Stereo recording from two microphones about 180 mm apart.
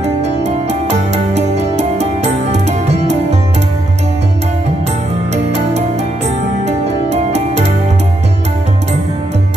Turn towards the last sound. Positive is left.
turn(degrees=-40)  # may be behind; listen again after turning